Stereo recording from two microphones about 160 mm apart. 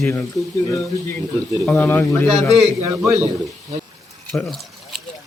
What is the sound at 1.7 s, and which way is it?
Speech, 15° left (ahead or behind).